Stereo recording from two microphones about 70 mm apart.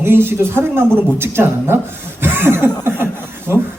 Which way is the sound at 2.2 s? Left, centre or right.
Right.